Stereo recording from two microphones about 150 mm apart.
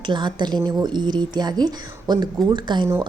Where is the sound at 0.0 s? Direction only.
30° right (ahead or behind).